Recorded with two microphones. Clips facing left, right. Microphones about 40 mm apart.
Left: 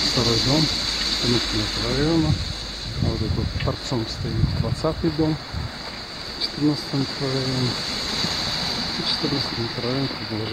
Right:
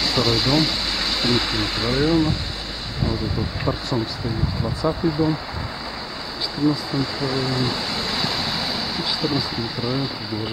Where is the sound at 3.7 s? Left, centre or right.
Centre.